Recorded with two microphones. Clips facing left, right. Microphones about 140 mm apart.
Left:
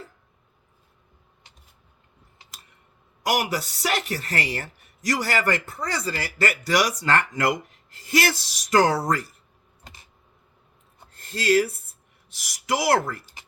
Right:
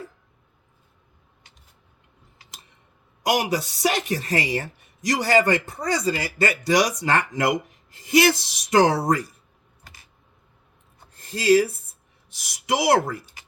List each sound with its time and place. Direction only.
3.2 s speech: 20° right (ahead or behind)
9.8 s a sound: 20° left (ahead or behind)
11.2 s speech: 15° right (ahead or behind)